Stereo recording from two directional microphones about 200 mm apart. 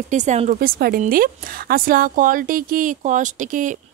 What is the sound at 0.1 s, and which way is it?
A woman's voice, 35° right (ahead or behind).